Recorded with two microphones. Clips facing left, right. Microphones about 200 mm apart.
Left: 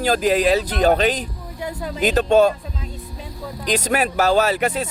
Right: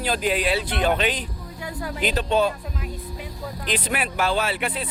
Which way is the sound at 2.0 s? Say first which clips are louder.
Left 7 dB; 45° left (ahead or behind).